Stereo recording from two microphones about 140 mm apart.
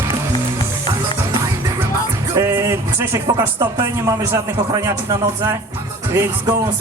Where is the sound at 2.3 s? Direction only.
20° right (ahead or behind).